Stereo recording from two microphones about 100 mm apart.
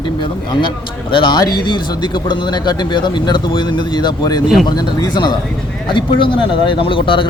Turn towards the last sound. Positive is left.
turn(degrees=55)  # may be behind; listen again after turning